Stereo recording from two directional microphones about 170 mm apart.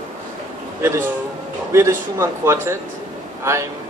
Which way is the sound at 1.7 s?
15° right (ahead or behind).